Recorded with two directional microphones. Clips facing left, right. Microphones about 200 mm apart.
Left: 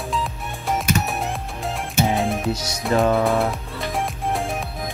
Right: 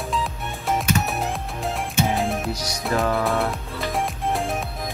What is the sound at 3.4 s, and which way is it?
Music, centre (ahead or behind).